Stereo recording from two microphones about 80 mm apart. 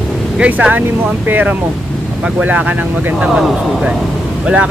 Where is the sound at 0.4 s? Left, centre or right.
Centre.